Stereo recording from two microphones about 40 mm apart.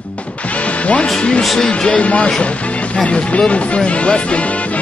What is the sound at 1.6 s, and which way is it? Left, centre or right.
Speech, left.